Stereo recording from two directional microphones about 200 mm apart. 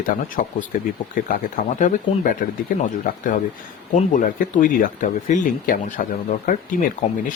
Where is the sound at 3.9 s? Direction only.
40° left (ahead or behind).